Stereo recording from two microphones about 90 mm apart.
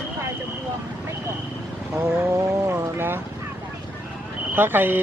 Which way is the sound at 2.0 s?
30° right (ahead or behind).